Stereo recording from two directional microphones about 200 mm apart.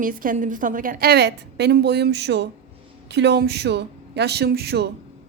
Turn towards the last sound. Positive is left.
turn(degrees=-55)  # may be behind; listen again after turning